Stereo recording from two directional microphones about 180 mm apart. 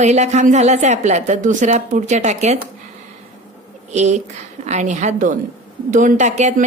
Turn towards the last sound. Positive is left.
turn(degrees=-40)  # may be behind; listen again after turning